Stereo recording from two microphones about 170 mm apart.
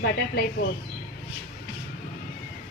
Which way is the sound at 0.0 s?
70° left (ahead or behind).